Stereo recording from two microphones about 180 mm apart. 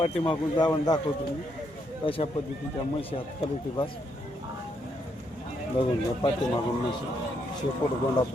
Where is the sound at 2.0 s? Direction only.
30° left (ahead or behind).